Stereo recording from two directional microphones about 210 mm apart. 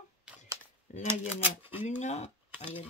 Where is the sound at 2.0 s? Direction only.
30° left (ahead or behind).